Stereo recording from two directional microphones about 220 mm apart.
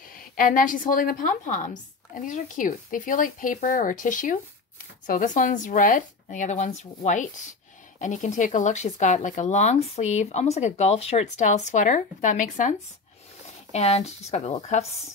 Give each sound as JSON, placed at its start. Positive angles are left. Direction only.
{"t": 0.0, "sound": "a woman's voice", "side_deg": 40}